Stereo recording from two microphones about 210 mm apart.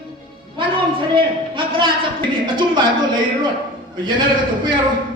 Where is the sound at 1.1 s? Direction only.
25° right (ahead or behind).